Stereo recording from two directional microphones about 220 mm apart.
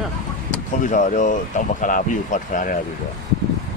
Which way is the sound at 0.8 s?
35° left (ahead or behind).